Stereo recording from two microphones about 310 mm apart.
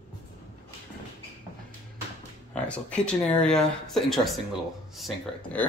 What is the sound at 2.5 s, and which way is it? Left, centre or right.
Speech, centre.